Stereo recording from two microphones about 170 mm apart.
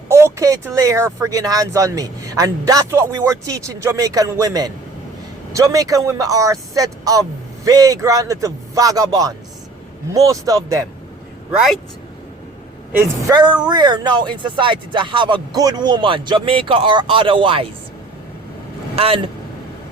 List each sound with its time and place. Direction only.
0.1 s speech: 15° right (ahead or behind)
11.5 s speech: centre (ahead or behind)
13.2 s speech: 25° right (ahead or behind)
18.9 s speech: 35° right (ahead or behind)